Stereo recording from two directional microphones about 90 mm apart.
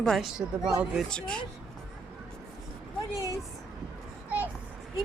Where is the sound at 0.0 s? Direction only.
5° left (ahead or behind).